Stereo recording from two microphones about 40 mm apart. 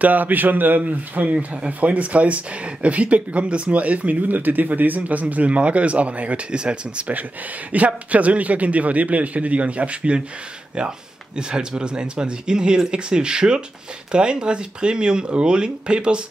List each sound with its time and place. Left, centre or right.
0.0 s a man's voice: right
1.3 s speech: right
1.7 s speech: right
4.4 s speech: right